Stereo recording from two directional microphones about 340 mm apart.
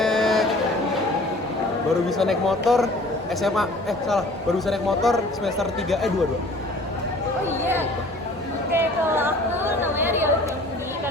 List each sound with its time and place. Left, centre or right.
0.0 s a sound: centre
2.0 s a man's voice: centre
8.7 s chatter: centre